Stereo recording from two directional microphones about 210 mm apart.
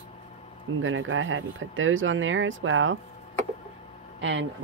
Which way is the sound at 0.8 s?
70° right (ahead or behind).